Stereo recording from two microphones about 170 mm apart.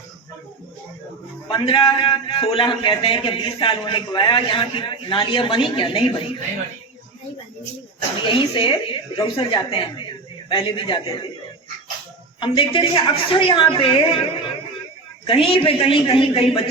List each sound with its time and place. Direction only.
1.5 s a man's voice: 30° left (ahead or behind)
8.3 s a man's voice: 30° left (ahead or behind)
12.4 s a woman's voice: 30° left (ahead or behind)
15.3 s a woman's voice: 30° left (ahead or behind)